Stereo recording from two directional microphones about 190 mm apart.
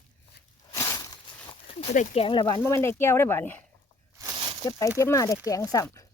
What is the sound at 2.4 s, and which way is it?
Speech, 15° left (ahead or behind).